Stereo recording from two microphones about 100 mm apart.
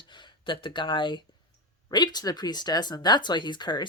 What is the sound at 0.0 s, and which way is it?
Speech, 50° left (ahead or behind).